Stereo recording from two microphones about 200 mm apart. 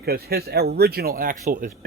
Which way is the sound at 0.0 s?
50° right (ahead or behind).